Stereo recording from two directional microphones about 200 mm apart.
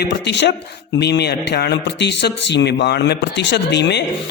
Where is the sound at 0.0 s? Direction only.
60° left (ahead or behind).